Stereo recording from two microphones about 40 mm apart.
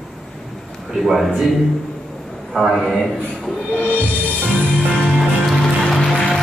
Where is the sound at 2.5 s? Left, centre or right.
Centre.